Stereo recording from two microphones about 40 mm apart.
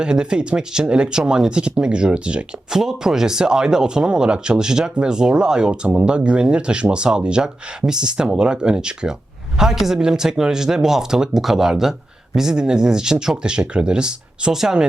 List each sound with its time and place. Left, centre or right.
0.0 s speech: right
2.6 s speech: centre
9.6 s speech: centre
14.5 s speech: centre